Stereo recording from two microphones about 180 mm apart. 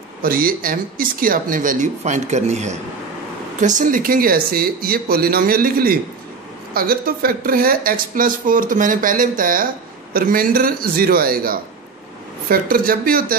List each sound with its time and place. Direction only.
0.2 s speech: 55° right (ahead or behind)